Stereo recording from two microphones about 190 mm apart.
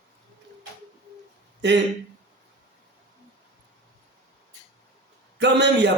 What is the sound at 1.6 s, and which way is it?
Speech, 65° right (ahead or behind).